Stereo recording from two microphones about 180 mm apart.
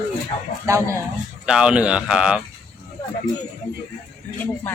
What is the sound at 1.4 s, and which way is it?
Speech, 5° right (ahead or behind).